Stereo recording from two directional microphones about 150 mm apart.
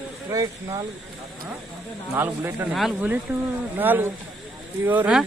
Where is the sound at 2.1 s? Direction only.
15° right (ahead or behind).